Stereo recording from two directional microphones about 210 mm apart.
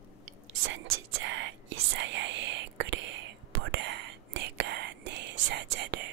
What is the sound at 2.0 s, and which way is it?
Whispering, 60° right (ahead or behind).